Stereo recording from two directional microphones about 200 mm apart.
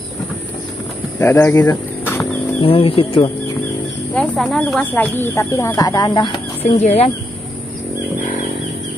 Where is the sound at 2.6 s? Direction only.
25° left (ahead or behind).